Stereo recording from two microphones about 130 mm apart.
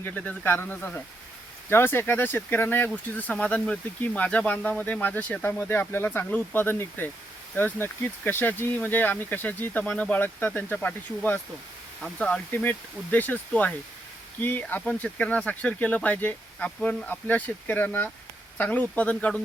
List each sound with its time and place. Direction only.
0.0 s speech: 10° left (ahead or behind)